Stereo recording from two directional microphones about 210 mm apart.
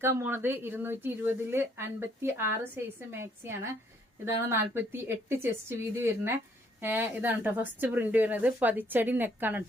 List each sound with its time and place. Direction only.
0.0 s speech: 10° right (ahead or behind)